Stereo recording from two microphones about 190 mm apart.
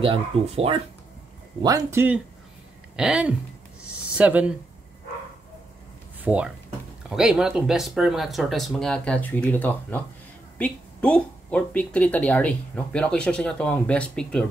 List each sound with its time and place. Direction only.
0.0 s speech: 30° right (ahead or behind)
1.6 s speech: 20° right (ahead or behind)
3.8 s a sound: 5° right (ahead or behind)
6.2 s speech: 5° right (ahead or behind)